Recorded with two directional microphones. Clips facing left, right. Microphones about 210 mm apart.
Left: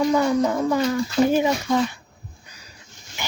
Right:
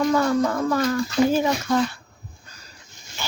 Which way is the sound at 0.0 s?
15° left (ahead or behind).